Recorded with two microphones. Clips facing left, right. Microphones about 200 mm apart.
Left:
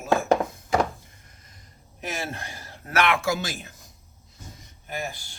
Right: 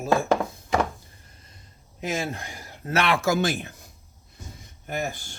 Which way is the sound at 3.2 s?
50° right (ahead or behind).